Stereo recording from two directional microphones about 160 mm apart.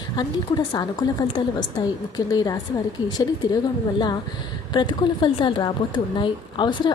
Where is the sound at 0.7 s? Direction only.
25° left (ahead or behind).